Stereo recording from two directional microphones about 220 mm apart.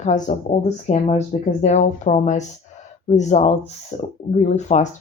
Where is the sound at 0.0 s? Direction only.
30° left (ahead or behind).